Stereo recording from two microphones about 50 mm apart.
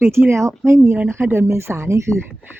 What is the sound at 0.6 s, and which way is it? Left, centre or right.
Speech, right.